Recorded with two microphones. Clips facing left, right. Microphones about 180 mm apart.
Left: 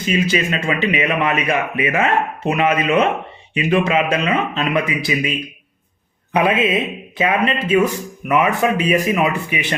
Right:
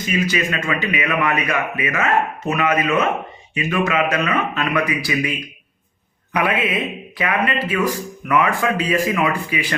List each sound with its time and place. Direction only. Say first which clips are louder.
0.1 s a man's voice: left 3 dB; 25° left (ahead or behind)